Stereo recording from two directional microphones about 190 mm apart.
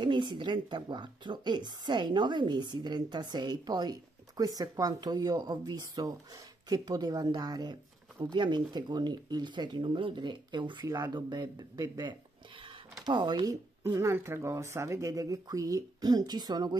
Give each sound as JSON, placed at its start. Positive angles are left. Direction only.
{"t": 0.0, "sound": "speech", "side_deg": -25}